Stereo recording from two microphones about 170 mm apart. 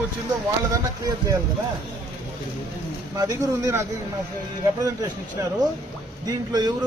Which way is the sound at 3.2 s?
20° right (ahead or behind).